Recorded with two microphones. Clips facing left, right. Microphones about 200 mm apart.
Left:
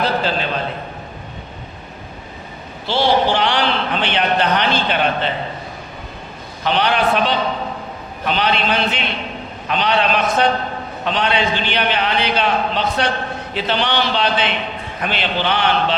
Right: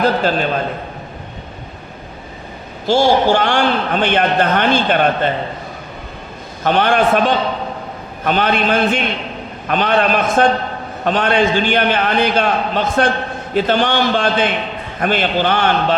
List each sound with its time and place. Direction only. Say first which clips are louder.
0.0 s a man's voice: right 4 dB; 50° right (ahead or behind)
2.8 s a man's voice: right 4 dB; 45° right (ahead or behind)
6.7 s a man's voice: right 4 dB; 50° right (ahead or behind)